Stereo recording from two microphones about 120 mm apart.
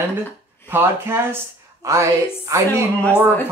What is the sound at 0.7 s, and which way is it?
Speech, 20° right (ahead or behind).